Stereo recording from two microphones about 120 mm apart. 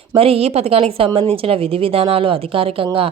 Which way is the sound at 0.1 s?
50° right (ahead or behind).